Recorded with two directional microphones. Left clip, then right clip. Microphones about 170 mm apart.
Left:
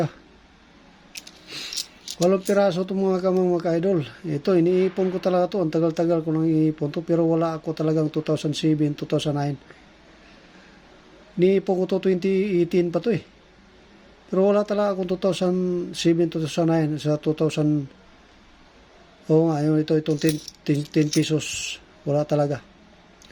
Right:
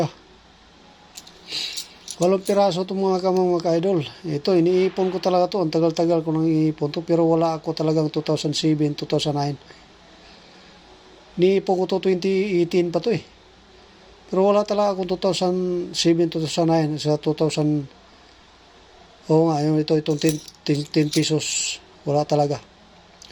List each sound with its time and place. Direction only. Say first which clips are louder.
2.5 s speech: right 1 dB; 25° left (ahead or behind)
11.3 s speech: right 1 dB; 25° left (ahead or behind)
14.3 s speech: right 2 dB; 25° left (ahead or behind)
19.3 s speech: right 1 dB; 30° left (ahead or behind)